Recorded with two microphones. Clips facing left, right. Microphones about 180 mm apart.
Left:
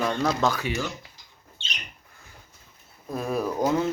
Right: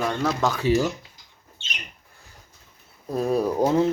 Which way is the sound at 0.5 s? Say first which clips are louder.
Right 8 dB; 35° right (ahead or behind).